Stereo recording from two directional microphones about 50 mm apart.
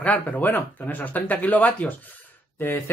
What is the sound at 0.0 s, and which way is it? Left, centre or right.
Speech, left.